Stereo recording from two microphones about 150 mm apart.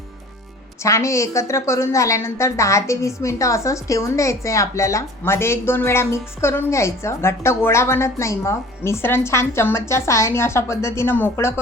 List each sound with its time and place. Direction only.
0.8 s a woman's voice: 20° left (ahead or behind)